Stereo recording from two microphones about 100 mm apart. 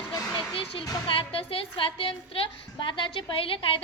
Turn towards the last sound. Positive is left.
turn(degrees=65)  # may be behind; listen again after turning